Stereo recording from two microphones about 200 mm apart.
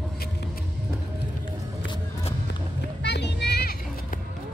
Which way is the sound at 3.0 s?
55° left (ahead or behind).